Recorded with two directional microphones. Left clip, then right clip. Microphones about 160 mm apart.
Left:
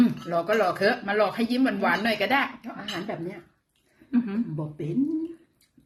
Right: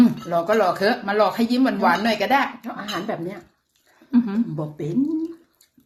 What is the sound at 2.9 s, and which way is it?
Speech, 25° left (ahead or behind).